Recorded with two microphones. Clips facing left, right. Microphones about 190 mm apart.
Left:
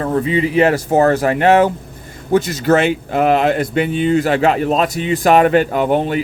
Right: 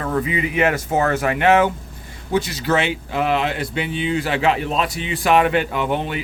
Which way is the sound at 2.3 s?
45° left (ahead or behind).